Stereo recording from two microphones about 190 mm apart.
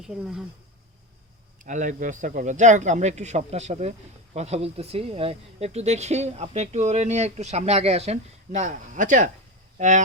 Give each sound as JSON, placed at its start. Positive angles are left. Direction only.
{"t": 0.0, "sound": "speech", "side_deg": -5}
{"t": 1.6, "sound": "speech", "side_deg": -40}